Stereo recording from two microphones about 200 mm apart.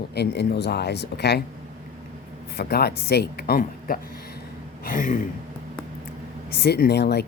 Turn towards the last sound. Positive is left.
turn(degrees=55)  # may be behind; listen again after turning